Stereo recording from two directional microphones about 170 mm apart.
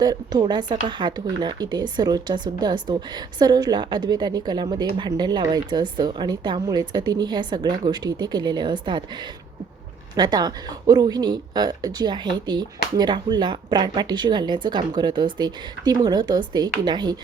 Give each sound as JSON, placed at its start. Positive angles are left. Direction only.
{"t": 0.0, "sound": "speech", "side_deg": -25}
{"t": 10.2, "sound": "speech", "side_deg": -25}